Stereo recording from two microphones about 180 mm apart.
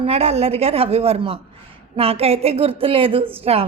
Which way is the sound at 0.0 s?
35° right (ahead or behind).